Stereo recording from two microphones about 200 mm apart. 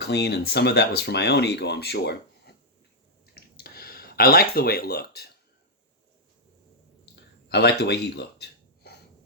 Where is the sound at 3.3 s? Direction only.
50° left (ahead or behind).